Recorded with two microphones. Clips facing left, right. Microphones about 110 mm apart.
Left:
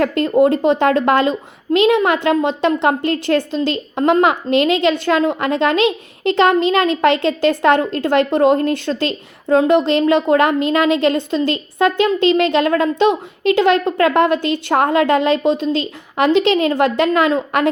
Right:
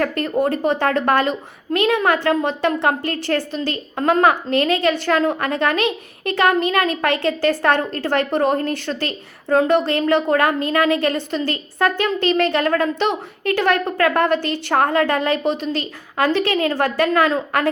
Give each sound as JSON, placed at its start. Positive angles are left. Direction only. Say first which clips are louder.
{"t": 0.0, "sound": "a woman's voice", "louder": "left 6 dB", "side_deg": 20}